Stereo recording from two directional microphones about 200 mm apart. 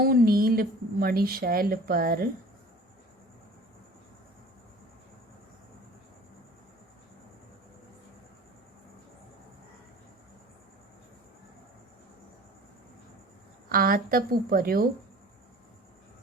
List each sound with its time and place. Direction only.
0.0 s a woman's voice: 50° right (ahead or behind)
13.7 s a woman's voice: 45° right (ahead or behind)